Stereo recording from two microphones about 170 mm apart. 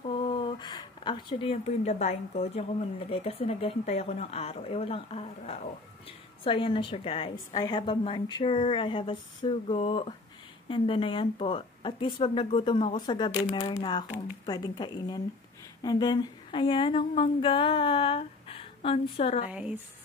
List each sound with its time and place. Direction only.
0.0 s a sound: 35° left (ahead or behind)
3.1 s a woman's voice: 35° left (ahead or behind)
19.4 s speech: 5° right (ahead or behind)